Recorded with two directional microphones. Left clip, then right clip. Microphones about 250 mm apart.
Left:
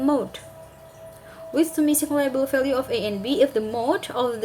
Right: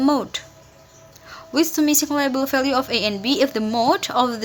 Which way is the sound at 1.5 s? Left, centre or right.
Right.